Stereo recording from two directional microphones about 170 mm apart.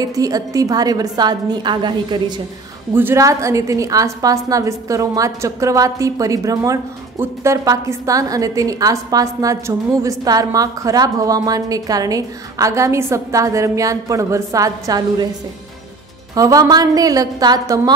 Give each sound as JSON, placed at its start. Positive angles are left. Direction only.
{"t": 0.0, "sound": "a woman's voice", "side_deg": -20}
{"t": 2.9, "sound": "a woman's voice", "side_deg": -15}
{"t": 16.3, "sound": "a woman's voice", "side_deg": -20}